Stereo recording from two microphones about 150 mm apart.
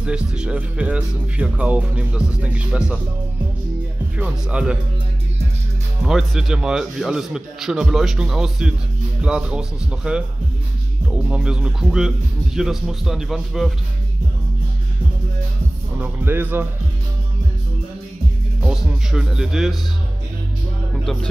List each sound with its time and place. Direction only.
0.0 s speech: 5° right (ahead or behind)
4.2 s speech: 5° right (ahead or behind)
6.0 s speech: centre (ahead or behind)
11.2 s speech: 5° right (ahead or behind)
16.0 s speech: 15° right (ahead or behind)
18.6 s speech: 5° right (ahead or behind)
21.0 s speech: centre (ahead or behind)